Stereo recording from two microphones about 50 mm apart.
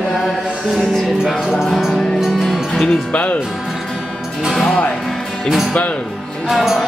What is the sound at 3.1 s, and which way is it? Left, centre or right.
Speech, left.